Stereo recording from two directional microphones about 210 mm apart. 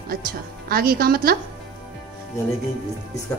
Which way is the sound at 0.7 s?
45° right (ahead or behind).